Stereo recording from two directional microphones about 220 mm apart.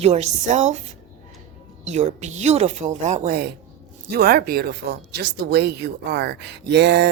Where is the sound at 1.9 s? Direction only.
30° right (ahead or behind).